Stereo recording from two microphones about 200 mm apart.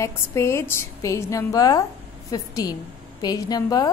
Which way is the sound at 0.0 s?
15° left (ahead or behind).